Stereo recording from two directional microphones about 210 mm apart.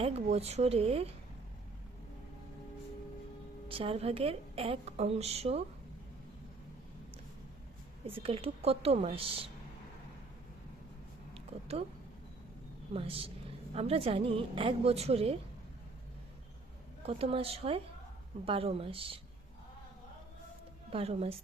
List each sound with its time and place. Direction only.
0.0 s a woman's voice: 30° right (ahead or behind)
3.7 s a woman's voice: 25° right (ahead or behind)
8.0 s a woman's voice: 25° right (ahead or behind)
11.3 s a sound: 30° right (ahead or behind)
12.9 s a woman's voice: 25° right (ahead or behind)
17.0 s a woman's voice: 30° right (ahead or behind)
20.9 s a woman's voice: 30° right (ahead or behind)